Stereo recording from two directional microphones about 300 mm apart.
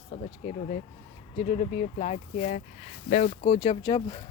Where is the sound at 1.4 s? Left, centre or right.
Left.